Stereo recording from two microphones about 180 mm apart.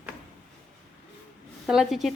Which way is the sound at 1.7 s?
Centre (ahead or behind).